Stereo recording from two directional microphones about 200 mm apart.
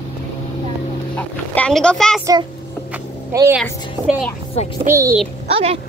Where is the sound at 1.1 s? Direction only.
5° left (ahead or behind).